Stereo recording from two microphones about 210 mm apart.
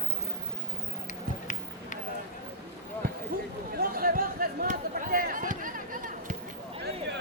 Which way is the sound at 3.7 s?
45° right (ahead or behind).